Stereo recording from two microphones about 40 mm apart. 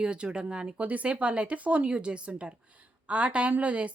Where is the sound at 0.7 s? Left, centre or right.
Right.